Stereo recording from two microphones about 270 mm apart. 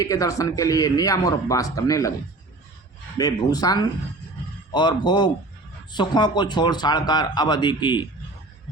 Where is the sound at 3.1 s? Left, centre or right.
Centre.